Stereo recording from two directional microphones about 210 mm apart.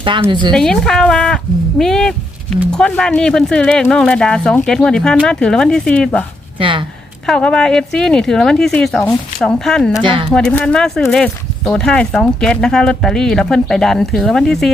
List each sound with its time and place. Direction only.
0.0 s speech: 25° right (ahead or behind)
0.5 s speech: 5° left (ahead or behind)
6.6 s speech: 25° right (ahead or behind)
7.3 s speech: 5° left (ahead or behind)